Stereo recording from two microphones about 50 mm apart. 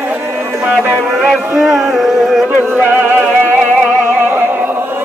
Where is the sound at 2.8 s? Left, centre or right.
Right.